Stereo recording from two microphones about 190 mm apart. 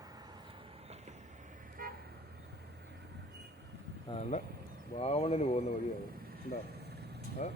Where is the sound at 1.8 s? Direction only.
50° right (ahead or behind).